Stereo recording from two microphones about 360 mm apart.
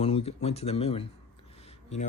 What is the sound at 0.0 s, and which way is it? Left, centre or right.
Speech, centre.